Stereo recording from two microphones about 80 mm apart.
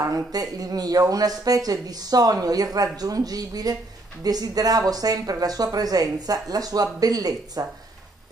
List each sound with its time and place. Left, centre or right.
0.1 s speech: right